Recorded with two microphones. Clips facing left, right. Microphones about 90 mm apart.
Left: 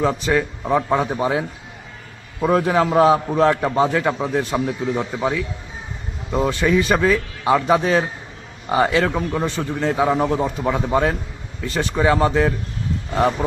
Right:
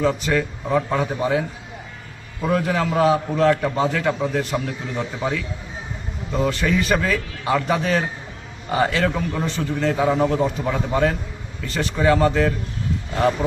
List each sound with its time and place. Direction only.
0.3 s a man's voice: 20° left (ahead or behind)
2.5 s a man's voice: 25° left (ahead or behind)
5.2 s a man's voice: 5° left (ahead or behind)
6.3 s a man's voice: 20° left (ahead or behind)